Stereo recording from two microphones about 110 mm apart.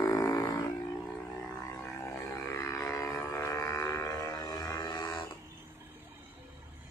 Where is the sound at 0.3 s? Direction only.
45° left (ahead or behind).